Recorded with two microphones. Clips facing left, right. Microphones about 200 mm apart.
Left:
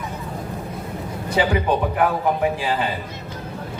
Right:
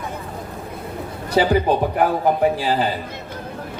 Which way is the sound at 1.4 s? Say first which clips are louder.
Right 3 dB; 35° right (ahead or behind).